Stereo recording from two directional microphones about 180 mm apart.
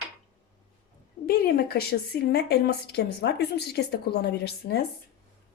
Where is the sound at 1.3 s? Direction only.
55° left (ahead or behind).